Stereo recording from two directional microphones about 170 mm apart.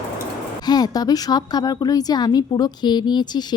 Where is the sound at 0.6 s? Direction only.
25° left (ahead or behind).